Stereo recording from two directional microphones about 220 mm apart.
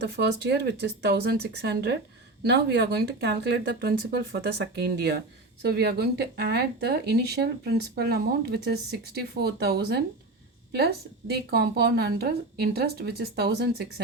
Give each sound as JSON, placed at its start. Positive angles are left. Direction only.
{"t": 0.0, "sound": "speech", "side_deg": -50}
{"t": 11.3, "sound": "speech", "side_deg": -45}